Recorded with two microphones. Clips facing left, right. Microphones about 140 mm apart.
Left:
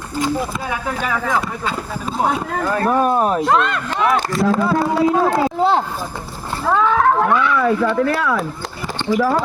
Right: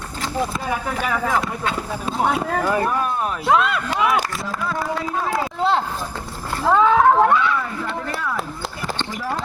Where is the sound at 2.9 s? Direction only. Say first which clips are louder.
Left 7 dB; 45° left (ahead or behind).